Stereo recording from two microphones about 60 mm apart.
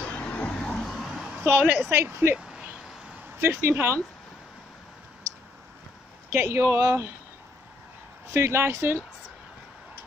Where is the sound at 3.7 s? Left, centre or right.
Right.